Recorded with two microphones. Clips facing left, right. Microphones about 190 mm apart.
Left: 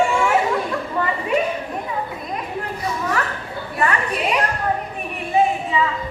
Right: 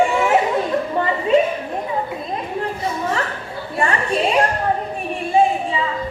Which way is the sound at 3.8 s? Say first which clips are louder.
Right 2 dB; 30° right (ahead or behind).